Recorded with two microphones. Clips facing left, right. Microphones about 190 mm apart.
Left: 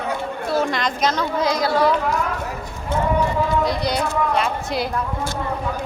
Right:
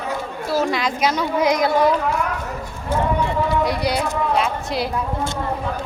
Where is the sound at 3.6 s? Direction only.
10° right (ahead or behind).